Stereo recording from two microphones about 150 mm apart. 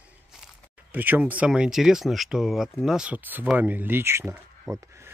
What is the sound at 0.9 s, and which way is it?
Speech, 10° right (ahead or behind).